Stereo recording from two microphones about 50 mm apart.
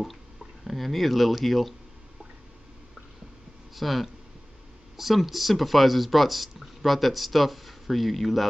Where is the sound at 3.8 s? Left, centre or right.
Centre.